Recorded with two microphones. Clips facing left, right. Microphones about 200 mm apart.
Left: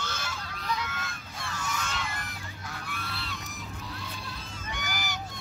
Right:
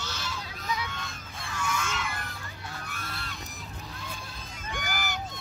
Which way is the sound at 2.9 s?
45° right (ahead or behind).